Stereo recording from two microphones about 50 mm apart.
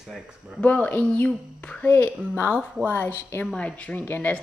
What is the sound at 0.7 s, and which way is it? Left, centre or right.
Speech, left.